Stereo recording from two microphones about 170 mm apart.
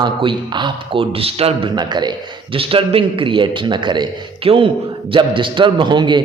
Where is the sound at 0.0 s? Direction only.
30° right (ahead or behind).